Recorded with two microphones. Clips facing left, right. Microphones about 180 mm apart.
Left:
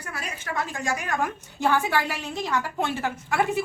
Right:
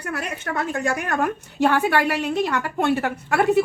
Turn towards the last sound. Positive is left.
turn(degrees=-65)  # may be behind; listen again after turning